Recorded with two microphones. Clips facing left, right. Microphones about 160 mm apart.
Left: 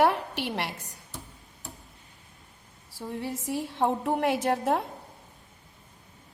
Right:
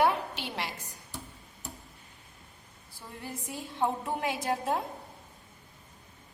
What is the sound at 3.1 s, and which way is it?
A woman's voice, 75° left (ahead or behind).